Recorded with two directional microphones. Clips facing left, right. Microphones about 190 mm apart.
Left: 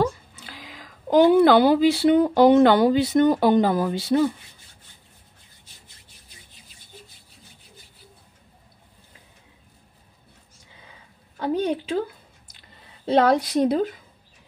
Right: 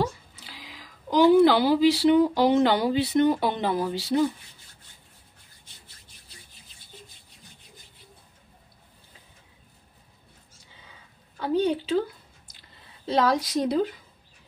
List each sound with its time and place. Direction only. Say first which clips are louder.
0.0 s a woman's voice: left 5 dB; 50° left (ahead or behind)
11.3 s a woman's voice: even; 50° left (ahead or behind)
13.0 s a woman's voice: left 5 dB; 60° left (ahead or behind)